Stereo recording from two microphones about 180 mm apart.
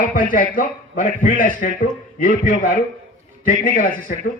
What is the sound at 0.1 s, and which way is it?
Speech, 50° left (ahead or behind).